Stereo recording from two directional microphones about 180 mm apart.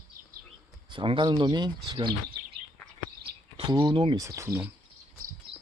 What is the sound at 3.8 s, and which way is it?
Speech, 25° right (ahead or behind).